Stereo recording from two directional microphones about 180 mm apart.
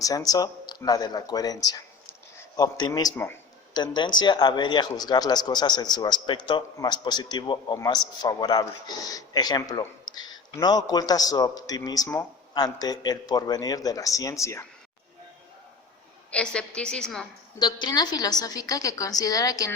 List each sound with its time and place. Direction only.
0.0 s speech: 20° left (ahead or behind)
16.3 s a woman's voice: 5° left (ahead or behind)
17.6 s speech: 25° left (ahead or behind)